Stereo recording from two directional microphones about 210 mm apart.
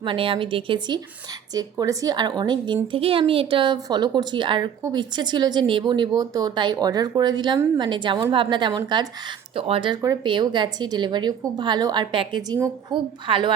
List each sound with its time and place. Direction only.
0.0 s speech: 25° right (ahead or behind)